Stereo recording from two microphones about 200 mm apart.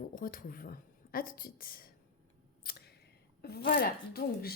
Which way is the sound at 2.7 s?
45° left (ahead or behind).